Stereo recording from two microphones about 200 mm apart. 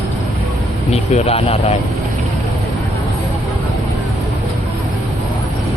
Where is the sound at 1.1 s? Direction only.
30° left (ahead or behind).